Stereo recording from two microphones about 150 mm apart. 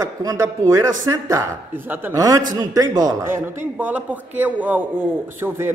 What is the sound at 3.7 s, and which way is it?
A man's voice, 10° right (ahead or behind).